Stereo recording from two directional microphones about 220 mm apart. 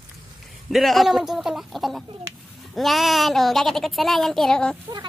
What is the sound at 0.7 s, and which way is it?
A child's voice, centre (ahead or behind).